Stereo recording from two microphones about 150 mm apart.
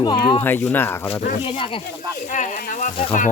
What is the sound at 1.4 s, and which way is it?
Speech, 35° left (ahead or behind).